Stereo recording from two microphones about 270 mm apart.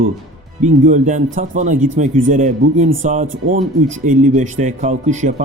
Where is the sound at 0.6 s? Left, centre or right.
Right.